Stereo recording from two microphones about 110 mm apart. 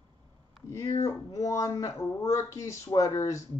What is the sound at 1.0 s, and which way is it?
Speech, 30° left (ahead or behind).